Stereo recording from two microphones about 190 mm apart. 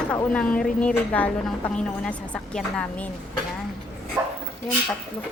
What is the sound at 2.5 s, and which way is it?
Speech, 5° left (ahead or behind).